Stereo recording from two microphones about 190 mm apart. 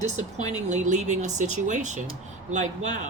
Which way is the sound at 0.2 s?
35° right (ahead or behind).